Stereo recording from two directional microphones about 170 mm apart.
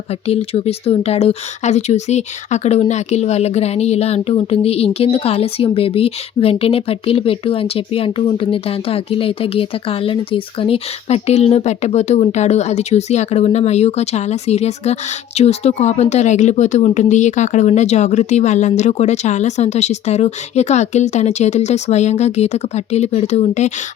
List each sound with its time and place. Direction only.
0.3 s speech: 35° left (ahead or behind)